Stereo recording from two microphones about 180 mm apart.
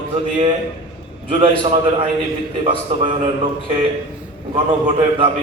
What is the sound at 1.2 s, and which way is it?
A man's voice, 30° right (ahead or behind).